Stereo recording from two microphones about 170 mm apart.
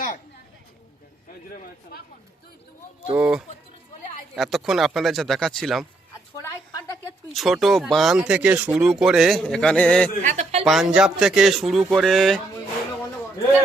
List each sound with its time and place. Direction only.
1.5 s a sound: 60° left (ahead or behind)
3.2 s speech: 5° right (ahead or behind)
6.4 s a sound: 20° left (ahead or behind)
7.3 s speech: centre (ahead or behind)
10.2 s speech: 40° right (ahead or behind)
10.7 s speech: centre (ahead or behind)